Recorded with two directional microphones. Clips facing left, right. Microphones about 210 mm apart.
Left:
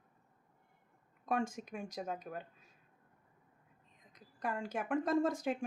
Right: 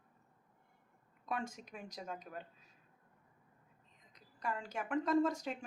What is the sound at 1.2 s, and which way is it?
Speech, 50° left (ahead or behind).